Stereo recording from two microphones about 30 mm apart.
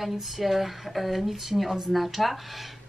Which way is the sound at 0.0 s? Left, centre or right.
Centre.